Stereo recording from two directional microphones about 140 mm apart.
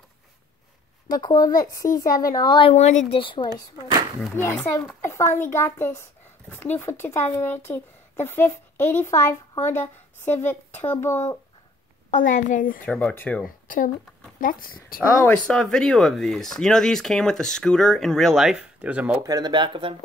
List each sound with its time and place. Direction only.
1.1 s a child's voice: 25° left (ahead or behind)
2.7 s speech: 55° left (ahead or behind)
3.1 s speech: 35° left (ahead or behind)
4.4 s a child's voice: 20° left (ahead or behind)
12.1 s a child's voice: 65° left (ahead or behind)
12.8 s speech: 10° left (ahead or behind)
14.4 s speech: 85° left
15.2 s speech: 5° left (ahead or behind); by 19.1 s 10° right (ahead or behind)
19.2 s speech: 30° right (ahead or behind)